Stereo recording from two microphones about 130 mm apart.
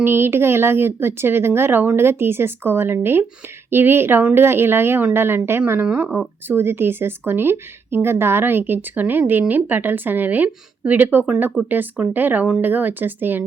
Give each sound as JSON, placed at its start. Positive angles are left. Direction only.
{"t": 0.0, "sound": "speech", "side_deg": -20}